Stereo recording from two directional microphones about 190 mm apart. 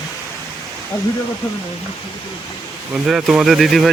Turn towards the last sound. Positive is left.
turn(degrees=0)  # may be behind; listen again after turning